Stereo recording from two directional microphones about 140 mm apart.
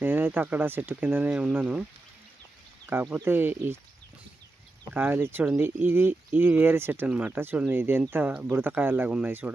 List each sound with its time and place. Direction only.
0.0 s speech: 15° right (ahead or behind)
4.9 s speech: 15° right (ahead or behind)